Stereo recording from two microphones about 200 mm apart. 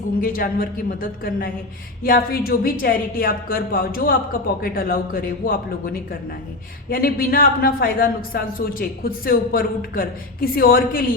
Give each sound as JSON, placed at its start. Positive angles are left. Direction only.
{"t": 0.2, "sound": "a woman's voice", "side_deg": 45}